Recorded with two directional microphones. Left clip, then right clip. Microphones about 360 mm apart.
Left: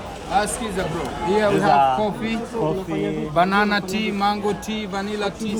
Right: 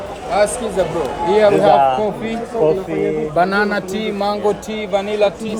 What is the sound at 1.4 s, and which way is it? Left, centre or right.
Speech, left.